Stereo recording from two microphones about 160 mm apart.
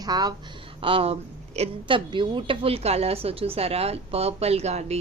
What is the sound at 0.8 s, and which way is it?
A woman's voice, 35° right (ahead or behind).